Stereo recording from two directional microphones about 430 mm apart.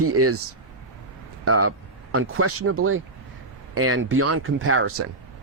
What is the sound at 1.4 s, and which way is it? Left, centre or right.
Speech, right.